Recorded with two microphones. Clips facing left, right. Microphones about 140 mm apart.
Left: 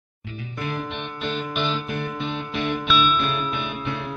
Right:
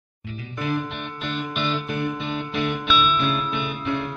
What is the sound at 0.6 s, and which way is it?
Music, centre (ahead or behind).